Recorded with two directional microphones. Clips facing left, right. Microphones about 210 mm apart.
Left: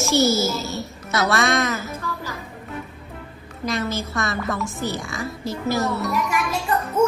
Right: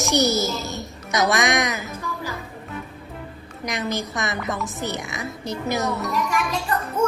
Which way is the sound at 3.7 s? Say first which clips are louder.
Left 1 dB; 15° right (ahead or behind).